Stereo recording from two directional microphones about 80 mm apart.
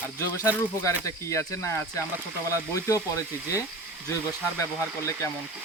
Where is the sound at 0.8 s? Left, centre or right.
Left.